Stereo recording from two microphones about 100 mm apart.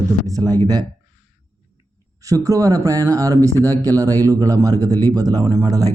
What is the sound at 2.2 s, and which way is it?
Speech, 35° right (ahead or behind).